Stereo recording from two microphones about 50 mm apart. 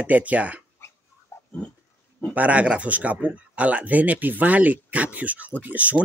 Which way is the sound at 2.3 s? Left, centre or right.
Right.